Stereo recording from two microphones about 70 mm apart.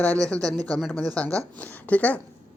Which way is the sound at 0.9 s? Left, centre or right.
Centre.